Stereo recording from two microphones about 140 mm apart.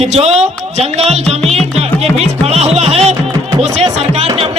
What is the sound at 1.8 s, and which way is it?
Music, 50° right (ahead or behind).